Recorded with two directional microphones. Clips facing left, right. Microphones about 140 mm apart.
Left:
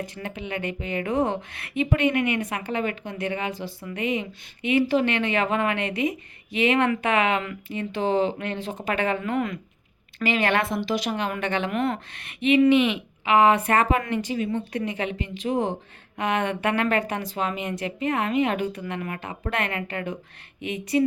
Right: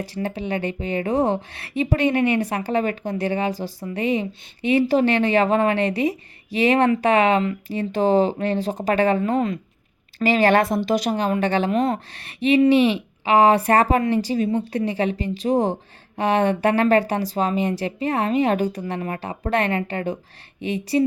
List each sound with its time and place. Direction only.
0.0 s a woman's voice: 35° right (ahead or behind)